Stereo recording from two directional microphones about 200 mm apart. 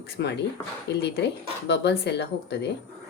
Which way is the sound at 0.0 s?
55° left (ahead or behind).